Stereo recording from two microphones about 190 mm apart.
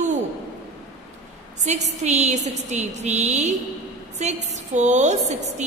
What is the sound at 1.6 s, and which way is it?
A woman's voice, 35° right (ahead or behind).